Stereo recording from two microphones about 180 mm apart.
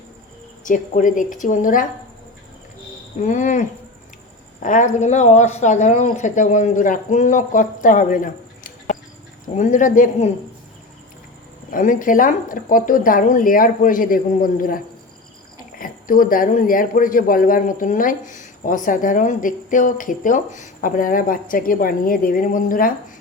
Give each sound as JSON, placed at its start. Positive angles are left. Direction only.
{"t": 0.6, "sound": "a man's voice", "side_deg": 45}
{"t": 3.2, "sound": "a man's voice", "side_deg": 45}
{"t": 11.7, "sound": "a man's voice", "side_deg": 50}
{"t": 15.8, "sound": "a man's voice", "side_deg": 50}